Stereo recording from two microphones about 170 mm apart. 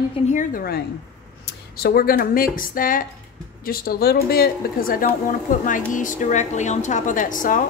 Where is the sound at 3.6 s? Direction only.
65° left (ahead or behind).